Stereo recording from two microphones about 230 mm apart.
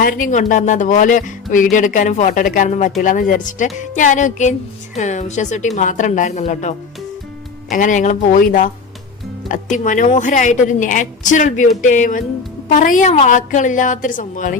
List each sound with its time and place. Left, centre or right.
0.0 s speech: left